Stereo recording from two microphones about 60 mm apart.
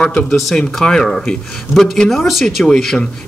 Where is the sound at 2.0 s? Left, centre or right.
Centre.